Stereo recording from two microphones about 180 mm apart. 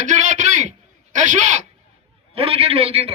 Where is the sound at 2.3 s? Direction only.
30° right (ahead or behind).